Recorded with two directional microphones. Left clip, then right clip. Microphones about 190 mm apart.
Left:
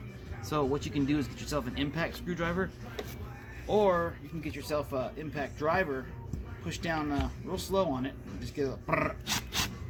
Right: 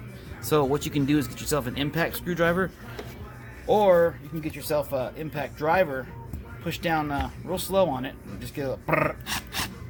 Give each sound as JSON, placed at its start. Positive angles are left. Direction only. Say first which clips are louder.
{"t": 0.4, "sound": "speech", "louder": "right 8 dB", "side_deg": -70}
{"t": 3.7, "sound": "speech", "louder": "right 8 dB", "side_deg": -60}